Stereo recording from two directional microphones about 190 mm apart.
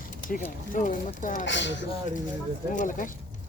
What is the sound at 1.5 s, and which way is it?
Speech, 70° left (ahead or behind).